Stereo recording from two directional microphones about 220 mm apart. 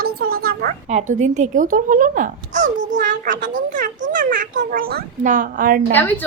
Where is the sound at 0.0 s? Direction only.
45° right (ahead or behind).